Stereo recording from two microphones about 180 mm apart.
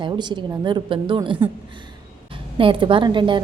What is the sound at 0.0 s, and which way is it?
A woman's voice, 25° right (ahead or behind).